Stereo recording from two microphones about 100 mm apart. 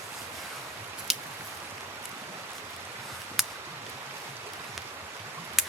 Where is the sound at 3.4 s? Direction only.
Centre (ahead or behind).